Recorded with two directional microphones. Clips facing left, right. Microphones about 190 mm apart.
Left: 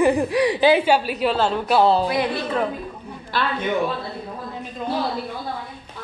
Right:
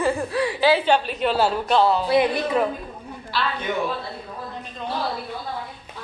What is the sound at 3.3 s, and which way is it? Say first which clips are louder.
Speech: left 2 dB; 50° left (ahead or behind).